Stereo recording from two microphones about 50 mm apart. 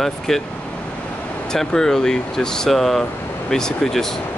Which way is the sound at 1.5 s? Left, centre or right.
Centre.